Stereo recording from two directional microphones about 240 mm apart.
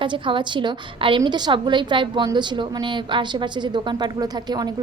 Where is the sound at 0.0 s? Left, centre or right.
Centre.